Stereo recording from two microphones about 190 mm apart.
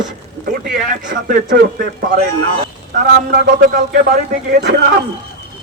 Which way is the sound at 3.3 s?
50° right (ahead or behind).